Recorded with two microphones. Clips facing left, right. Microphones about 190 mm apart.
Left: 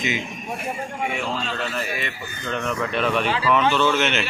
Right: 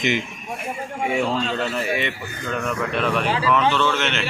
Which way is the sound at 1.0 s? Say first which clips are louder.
Right 6 dB; 30° right (ahead or behind).